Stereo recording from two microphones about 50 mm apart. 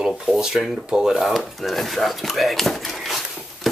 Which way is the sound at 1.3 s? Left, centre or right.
Centre.